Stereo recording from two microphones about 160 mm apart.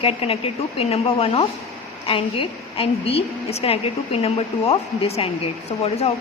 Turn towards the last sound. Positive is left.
turn(degrees=40)  # may be behind; listen again after turning